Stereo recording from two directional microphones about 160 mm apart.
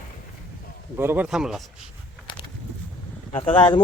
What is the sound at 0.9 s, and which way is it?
Speech, 15° right (ahead or behind).